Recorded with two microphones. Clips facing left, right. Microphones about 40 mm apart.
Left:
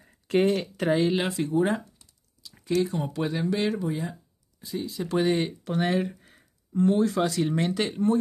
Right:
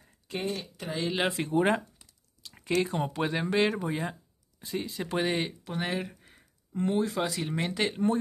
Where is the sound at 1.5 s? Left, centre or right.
Right.